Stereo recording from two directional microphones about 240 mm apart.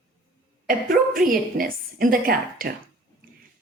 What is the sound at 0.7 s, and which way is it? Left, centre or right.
Speech, right.